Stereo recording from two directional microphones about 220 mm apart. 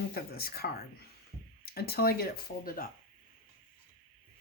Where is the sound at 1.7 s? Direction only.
45° left (ahead or behind).